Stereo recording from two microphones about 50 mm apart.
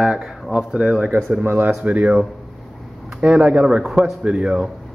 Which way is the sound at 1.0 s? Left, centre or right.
Right.